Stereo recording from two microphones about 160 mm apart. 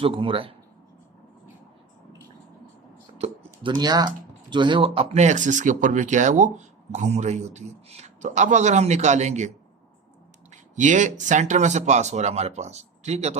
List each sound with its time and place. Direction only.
0.0 s speech: 35° right (ahead or behind)
3.2 s speech: 30° right (ahead or behind); by 9.5 s 45° right (ahead or behind)
10.5 s speech: 50° right (ahead or behind)